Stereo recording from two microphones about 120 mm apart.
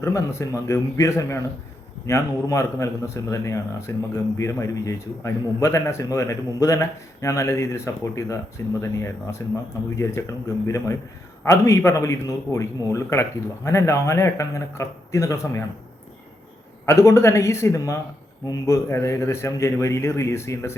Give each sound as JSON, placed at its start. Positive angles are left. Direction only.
{"t": 0.0, "sound": "a man's voice", "side_deg": 25}
{"t": 16.8, "sound": "a man's voice", "side_deg": 25}